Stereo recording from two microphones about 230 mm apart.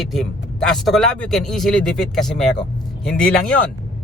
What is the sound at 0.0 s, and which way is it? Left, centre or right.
Speech, centre.